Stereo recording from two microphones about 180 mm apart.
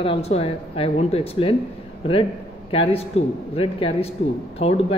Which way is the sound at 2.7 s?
30° left (ahead or behind).